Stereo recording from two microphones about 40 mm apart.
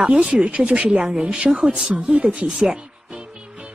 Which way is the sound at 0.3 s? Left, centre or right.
Right.